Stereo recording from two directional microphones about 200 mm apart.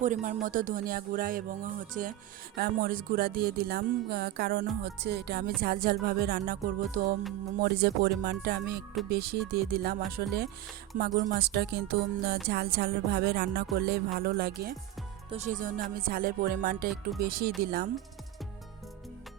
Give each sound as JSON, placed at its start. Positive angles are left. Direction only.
{"t": 0.0, "sound": "speech", "side_deg": -40}
{"t": 0.4, "sound": "music", "side_deg": -40}
{"t": 10.9, "sound": "speech", "side_deg": -40}
{"t": 11.3, "sound": "music", "side_deg": -55}
{"t": 15.3, "sound": "music", "side_deg": -35}